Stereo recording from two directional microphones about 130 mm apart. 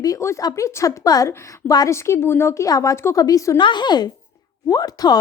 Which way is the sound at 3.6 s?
35° left (ahead or behind).